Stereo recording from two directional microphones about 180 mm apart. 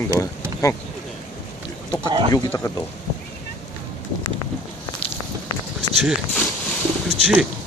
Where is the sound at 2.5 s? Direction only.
15° left (ahead or behind).